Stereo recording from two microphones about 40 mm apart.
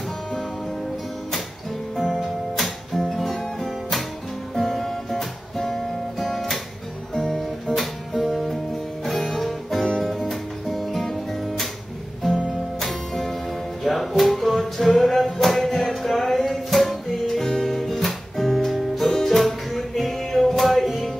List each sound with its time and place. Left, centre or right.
2.0 s music: centre
4.6 s guitar: centre
7.3 s music: centre
9.0 s guitar: centre
10.0 s music: centre
12.8 s music: centre
17.7 s music: centre